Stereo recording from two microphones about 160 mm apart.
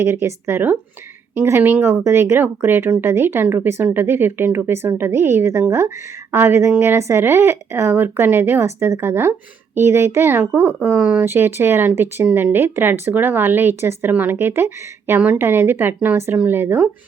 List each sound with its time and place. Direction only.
0.0 s speech: 15° right (ahead or behind)